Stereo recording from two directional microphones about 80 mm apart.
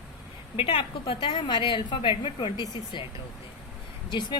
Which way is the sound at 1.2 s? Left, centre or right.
Left.